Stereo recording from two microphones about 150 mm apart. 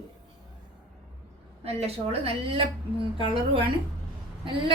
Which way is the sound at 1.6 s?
40° right (ahead or behind).